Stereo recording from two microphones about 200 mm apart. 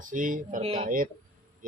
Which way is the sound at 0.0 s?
40° right (ahead or behind).